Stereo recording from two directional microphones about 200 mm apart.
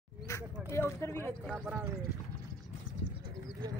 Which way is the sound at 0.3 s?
15° left (ahead or behind).